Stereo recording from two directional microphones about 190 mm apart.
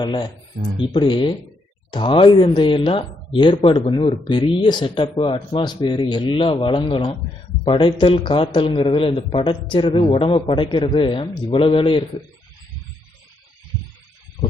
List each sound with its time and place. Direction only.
0.0 s speech: 25° left (ahead or behind)